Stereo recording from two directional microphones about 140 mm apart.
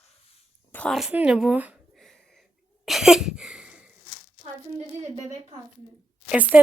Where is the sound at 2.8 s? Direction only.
Centre (ahead or behind).